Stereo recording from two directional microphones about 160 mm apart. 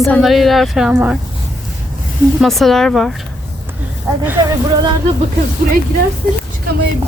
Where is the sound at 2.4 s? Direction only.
Centre (ahead or behind).